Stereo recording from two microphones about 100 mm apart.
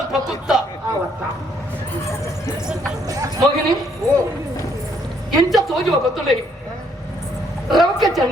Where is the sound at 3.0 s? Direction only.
35° right (ahead or behind).